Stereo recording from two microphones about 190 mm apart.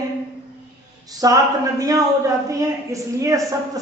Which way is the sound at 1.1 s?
20° right (ahead or behind).